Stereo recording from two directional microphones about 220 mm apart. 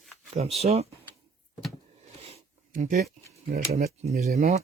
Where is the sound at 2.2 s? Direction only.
25° right (ahead or behind).